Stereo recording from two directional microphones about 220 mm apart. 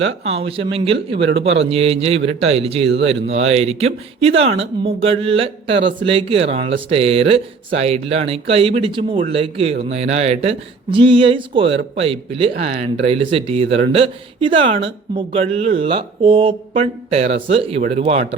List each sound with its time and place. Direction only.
0.3 s speech: 25° right (ahead or behind)